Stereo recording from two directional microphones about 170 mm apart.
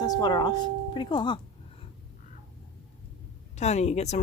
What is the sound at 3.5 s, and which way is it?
Speech, 40° left (ahead or behind).